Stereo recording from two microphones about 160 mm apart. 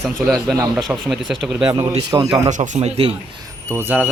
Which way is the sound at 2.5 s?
50° right (ahead or behind).